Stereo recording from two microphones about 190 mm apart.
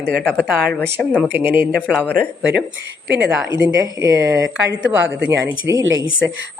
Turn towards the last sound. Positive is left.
turn(degrees=-20)  # may be behind; listen again after turning